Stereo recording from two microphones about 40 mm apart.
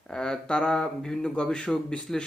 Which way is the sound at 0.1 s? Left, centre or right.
Centre.